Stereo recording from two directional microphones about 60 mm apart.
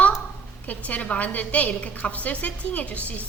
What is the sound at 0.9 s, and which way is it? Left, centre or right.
A woman's voice, left.